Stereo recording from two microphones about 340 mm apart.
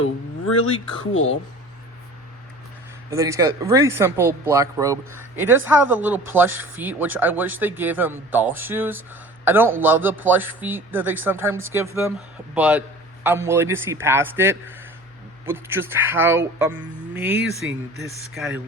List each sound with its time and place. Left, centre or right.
0.0 s speech: left
3.1 s speech: centre